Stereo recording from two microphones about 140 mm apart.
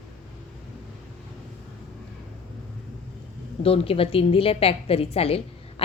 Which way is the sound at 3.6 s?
45° left (ahead or behind).